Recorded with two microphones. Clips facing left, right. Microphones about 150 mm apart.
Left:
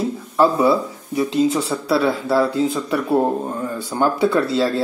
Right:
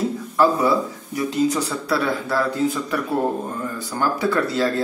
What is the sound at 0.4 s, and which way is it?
Speech, 25° left (ahead or behind).